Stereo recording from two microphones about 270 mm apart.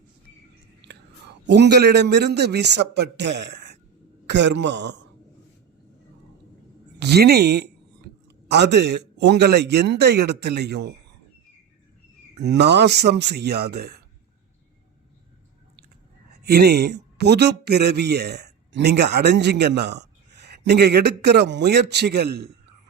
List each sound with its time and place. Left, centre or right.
0.8 s whispering: right
1.5 s a man's voice: right
7.0 s speech: right
12.5 s a man's voice: right
16.3 s speech: right